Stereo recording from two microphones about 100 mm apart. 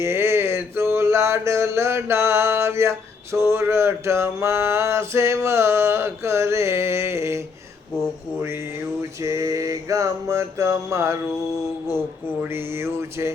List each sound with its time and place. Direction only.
0.0 s a sound: 25° right (ahead or behind)
0.9 s mantra: 30° right (ahead or behind)
9.2 s mantra: 30° right (ahead or behind)